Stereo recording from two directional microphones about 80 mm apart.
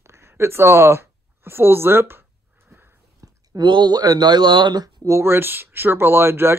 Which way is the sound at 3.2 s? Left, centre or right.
Right.